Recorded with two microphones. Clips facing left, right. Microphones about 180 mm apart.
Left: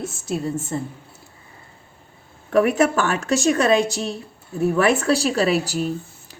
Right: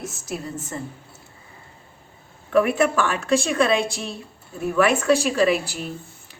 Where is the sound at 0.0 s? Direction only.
30° left (ahead or behind).